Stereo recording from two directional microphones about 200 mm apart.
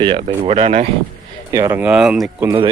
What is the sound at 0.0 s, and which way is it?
Speech, 25° right (ahead or behind).